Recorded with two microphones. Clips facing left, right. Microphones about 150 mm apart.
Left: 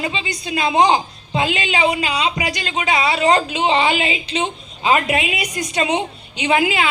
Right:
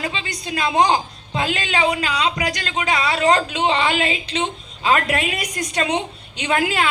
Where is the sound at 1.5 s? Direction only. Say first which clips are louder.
Left 1 dB; 45° right (ahead or behind).